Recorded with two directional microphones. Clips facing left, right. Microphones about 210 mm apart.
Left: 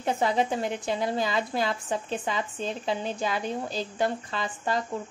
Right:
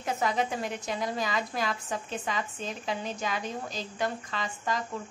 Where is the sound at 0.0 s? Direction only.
30° left (ahead or behind).